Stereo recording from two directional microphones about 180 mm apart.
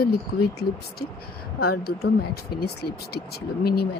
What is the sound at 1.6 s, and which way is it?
Speech, 60° left (ahead or behind).